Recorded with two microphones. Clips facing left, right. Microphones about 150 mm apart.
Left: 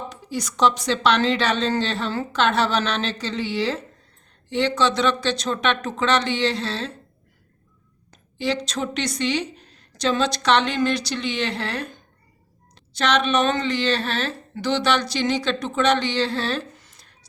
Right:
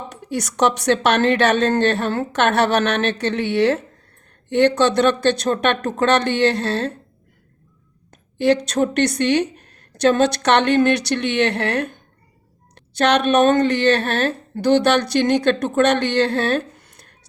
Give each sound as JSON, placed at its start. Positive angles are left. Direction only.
{"t": 0.2, "sound": "speech", "side_deg": -70}
{"t": 8.1, "sound": "a sound", "side_deg": -55}
{"t": 8.6, "sound": "speech", "side_deg": -55}